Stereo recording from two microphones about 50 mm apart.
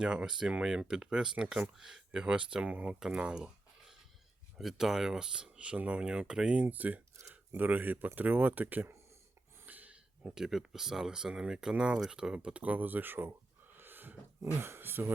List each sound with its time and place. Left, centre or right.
0.0 s speech: centre
2.2 s speech: right
4.5 s speech: centre; by 8.9 s right
9.6 s a sound: right
10.3 s speech: centre; by 13.3 s right
13.7 s a sound: right